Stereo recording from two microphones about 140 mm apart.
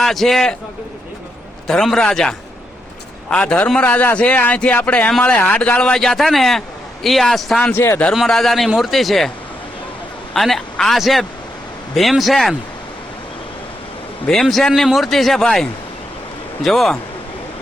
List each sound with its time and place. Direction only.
0.0 s speech: centre (ahead or behind)
1.6 s a man's voice: centre (ahead or behind)
7.7 s a man's voice: 15° left (ahead or behind)
8.1 s speech: centre (ahead or behind)
10.3 s speech: centre (ahead or behind)
14.3 s speech: centre (ahead or behind)
16.6 s speech: centre (ahead or behind)